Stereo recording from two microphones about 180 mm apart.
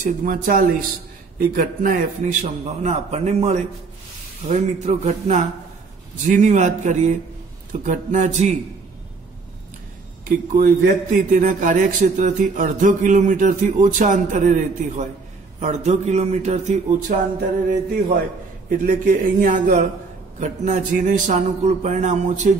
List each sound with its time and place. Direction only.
0.0 s a man's voice: 50° right (ahead or behind)
10.2 s a man's voice: 50° right (ahead or behind)
18.7 s a man's voice: 45° right (ahead or behind)